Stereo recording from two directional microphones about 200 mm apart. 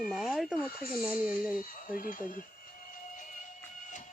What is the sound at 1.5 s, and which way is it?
Speech, 45° left (ahead or behind).